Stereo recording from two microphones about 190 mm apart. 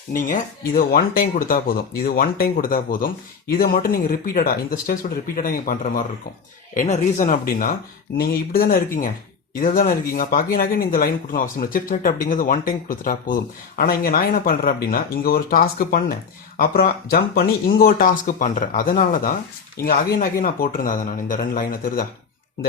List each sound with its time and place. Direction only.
0.1 s speech: 45° left (ahead or behind)